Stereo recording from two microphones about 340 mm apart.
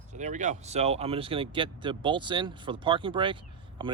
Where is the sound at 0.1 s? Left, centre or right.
Right.